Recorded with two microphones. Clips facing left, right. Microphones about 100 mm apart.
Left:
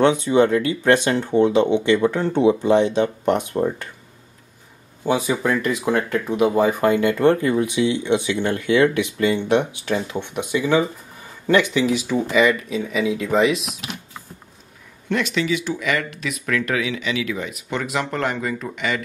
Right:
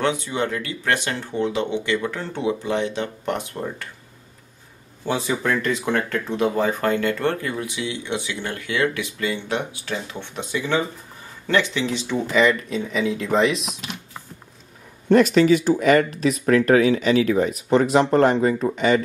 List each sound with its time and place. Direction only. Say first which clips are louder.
0.0 s speech: left 7 dB; 20° left (ahead or behind)
5.0 s speech: left 3 dB; 15° left (ahead or behind)
15.0 s speech: right 7 dB; 40° right (ahead or behind)